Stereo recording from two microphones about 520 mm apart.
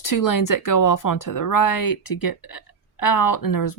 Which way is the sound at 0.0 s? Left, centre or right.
Left.